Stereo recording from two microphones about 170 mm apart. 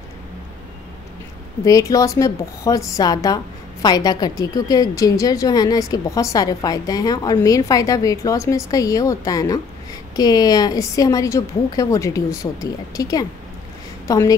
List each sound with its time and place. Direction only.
1.6 s a woman's voice: 20° left (ahead or behind)